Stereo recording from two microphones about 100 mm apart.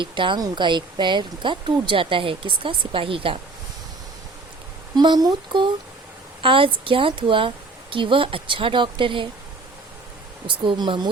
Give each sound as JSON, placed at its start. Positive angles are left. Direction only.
{"t": 0.0, "sound": "speech", "side_deg": -55}
{"t": 4.9, "sound": "speech", "side_deg": -45}
{"t": 6.4, "sound": "speech", "side_deg": -65}
{"t": 10.4, "sound": "speech", "side_deg": -55}